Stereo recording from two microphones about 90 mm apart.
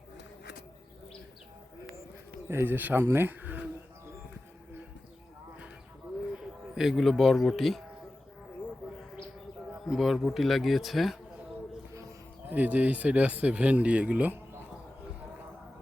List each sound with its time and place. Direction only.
2.5 s speech: 25° right (ahead or behind)
6.3 s speech: 5° right (ahead or behind)
9.8 s speech: centre (ahead or behind)
12.5 s speech: 15° right (ahead or behind)